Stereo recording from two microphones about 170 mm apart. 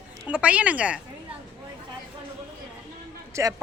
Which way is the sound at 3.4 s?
15° right (ahead or behind).